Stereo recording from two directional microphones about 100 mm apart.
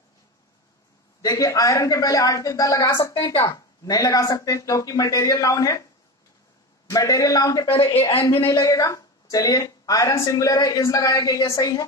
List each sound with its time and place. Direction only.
1.2 s a woman's voice: 35° left (ahead or behind)
6.9 s a woman's voice: 35° left (ahead or behind)